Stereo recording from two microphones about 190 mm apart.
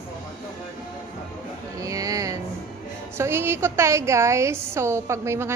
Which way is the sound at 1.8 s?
15° right (ahead or behind).